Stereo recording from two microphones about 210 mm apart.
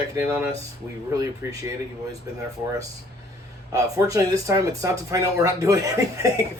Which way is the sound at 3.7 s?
15° right (ahead or behind).